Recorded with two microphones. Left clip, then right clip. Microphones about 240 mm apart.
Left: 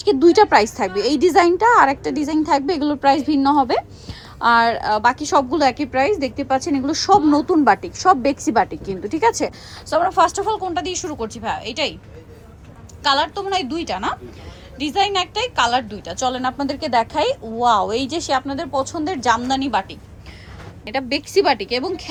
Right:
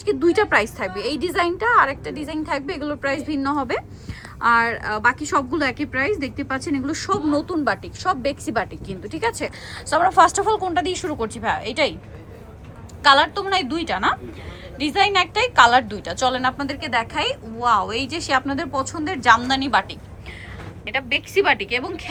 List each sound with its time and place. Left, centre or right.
0.0 s a woman's voice: centre
9.0 s a woman's voice: centre
13.1 s a woman's voice: centre
14.8 s a woman's voice: left
15.0 s a woman's voice: centre
17.9 s speech: left
18.3 s a woman's voice: centre